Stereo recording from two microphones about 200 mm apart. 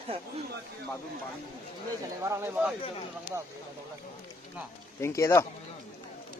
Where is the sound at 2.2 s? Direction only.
10° right (ahead or behind).